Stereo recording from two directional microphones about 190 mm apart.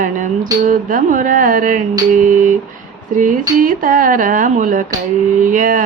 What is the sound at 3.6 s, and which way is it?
Tuning fork, 45° right (ahead or behind).